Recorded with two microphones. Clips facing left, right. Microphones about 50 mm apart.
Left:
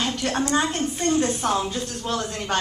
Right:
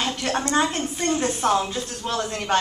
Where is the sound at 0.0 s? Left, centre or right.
Centre.